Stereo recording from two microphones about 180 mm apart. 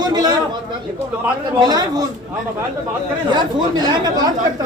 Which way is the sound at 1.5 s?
20° right (ahead or behind).